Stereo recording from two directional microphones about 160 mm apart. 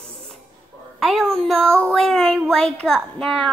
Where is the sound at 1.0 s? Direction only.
Centre (ahead or behind).